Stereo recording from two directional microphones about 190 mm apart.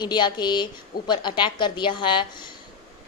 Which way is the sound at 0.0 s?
25° left (ahead or behind).